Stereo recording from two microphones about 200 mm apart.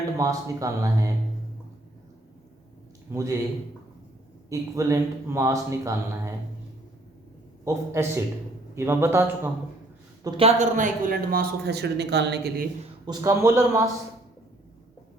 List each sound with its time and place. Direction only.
0.2 s speech: 15° right (ahead or behind)
3.1 s speech: 15° right (ahead or behind)
4.4 s speech: 15° right (ahead or behind)
7.6 s speech: 15° right (ahead or behind)
10.2 s a woman's voice: 30° right (ahead or behind); by 12.6 s 55° right (ahead or behind)
13.1 s speech: 15° right (ahead or behind)